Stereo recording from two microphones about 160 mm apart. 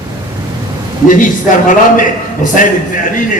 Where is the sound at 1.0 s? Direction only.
55° left (ahead or behind).